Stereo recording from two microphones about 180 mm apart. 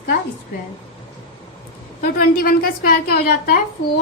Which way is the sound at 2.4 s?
55° left (ahead or behind).